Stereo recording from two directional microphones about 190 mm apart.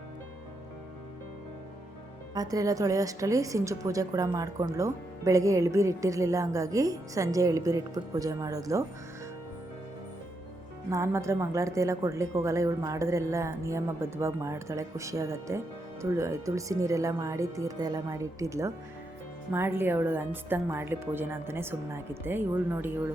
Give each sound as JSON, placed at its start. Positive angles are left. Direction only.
{"t": 2.3, "sound": "speech", "side_deg": -20}
{"t": 10.8, "sound": "speech", "side_deg": -15}